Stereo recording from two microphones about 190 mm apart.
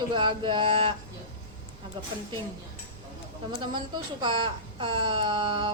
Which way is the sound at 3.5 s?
25° right (ahead or behind).